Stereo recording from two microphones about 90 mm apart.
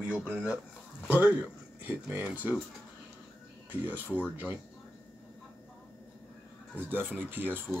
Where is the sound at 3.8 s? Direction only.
20° right (ahead or behind).